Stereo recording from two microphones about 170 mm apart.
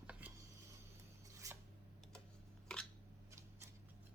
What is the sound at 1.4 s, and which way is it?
Rub, 20° right (ahead or behind).